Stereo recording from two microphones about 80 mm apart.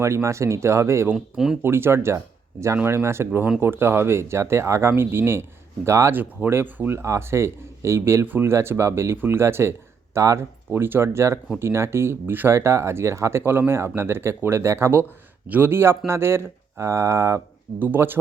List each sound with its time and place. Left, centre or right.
0.0 s speech: right
1.1 s speech: centre
1.6 s speech: right
10.7 s speech: right
17.7 s speech: right